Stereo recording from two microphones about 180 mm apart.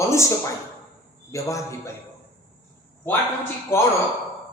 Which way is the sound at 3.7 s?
15° left (ahead or behind).